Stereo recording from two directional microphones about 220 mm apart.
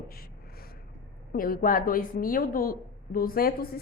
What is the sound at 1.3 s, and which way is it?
A woman's voice, 40° left (ahead or behind).